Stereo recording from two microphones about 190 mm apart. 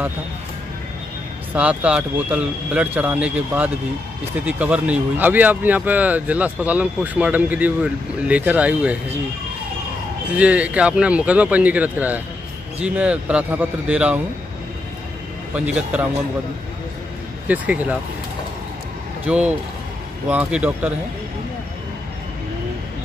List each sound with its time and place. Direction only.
1.5 s speech: 5° right (ahead or behind)
10.3 s speech: 5° right (ahead or behind)
15.5 s speech: 5° right (ahead or behind)
17.5 s speech: 5° right (ahead or behind)
19.2 s speech: 10° right (ahead or behind)